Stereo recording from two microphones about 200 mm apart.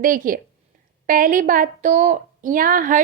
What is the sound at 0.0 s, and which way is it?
A woman's voice, 45° right (ahead or behind).